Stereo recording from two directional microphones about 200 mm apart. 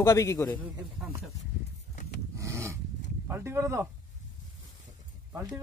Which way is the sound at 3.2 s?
15° right (ahead or behind).